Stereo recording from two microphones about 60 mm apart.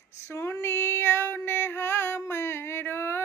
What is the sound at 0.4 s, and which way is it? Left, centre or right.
Female singing, left.